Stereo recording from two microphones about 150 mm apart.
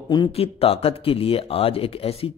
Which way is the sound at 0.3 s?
40° left (ahead or behind).